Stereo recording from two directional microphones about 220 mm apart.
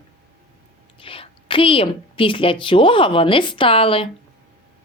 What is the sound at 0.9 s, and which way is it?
A woman's voice, 25° left (ahead or behind).